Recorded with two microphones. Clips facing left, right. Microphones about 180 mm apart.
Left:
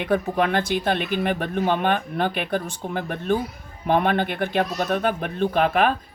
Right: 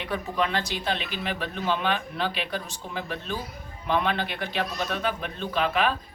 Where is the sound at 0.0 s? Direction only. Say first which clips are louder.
Left 6 dB; 50° left (ahead or behind).